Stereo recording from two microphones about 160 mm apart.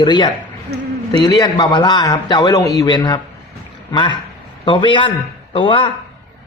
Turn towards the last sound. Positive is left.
turn(degrees=30)  # may be behind; listen again after turning